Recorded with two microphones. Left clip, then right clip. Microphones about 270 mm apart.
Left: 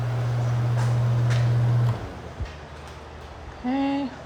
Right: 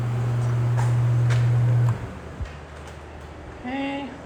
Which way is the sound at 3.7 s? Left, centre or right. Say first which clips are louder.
Left 3 dB; left.